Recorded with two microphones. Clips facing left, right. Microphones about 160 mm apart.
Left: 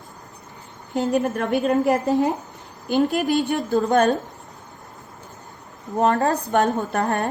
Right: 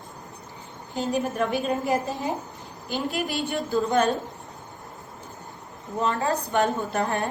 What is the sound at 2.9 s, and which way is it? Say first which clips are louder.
A woman's voice: left 9 dB; 45° left (ahead or behind).